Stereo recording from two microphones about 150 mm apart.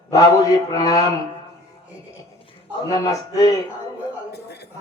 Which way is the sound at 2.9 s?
25° left (ahead or behind).